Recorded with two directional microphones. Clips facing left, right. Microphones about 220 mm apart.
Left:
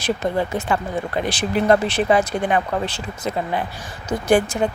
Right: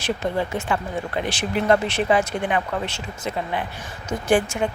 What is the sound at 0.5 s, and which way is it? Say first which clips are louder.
Speech: left 3 dB; 40° left (ahead or behind).